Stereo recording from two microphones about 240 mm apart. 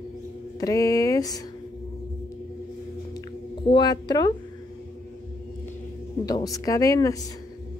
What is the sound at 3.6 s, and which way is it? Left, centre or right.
Speech, centre.